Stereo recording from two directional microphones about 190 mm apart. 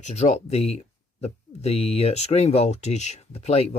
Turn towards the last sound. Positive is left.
turn(degrees=35)  # may be behind; listen again after turning